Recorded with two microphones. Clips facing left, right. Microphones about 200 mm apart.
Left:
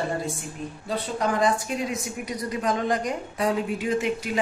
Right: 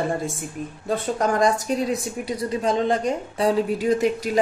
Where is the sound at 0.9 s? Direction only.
45° right (ahead or behind).